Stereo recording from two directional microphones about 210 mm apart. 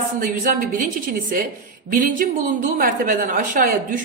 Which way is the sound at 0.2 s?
40° right (ahead or behind).